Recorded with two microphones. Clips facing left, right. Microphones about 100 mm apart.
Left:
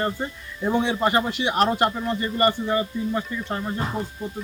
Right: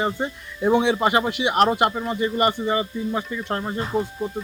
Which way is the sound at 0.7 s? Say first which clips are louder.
Right 4 dB; 60° right (ahead or behind).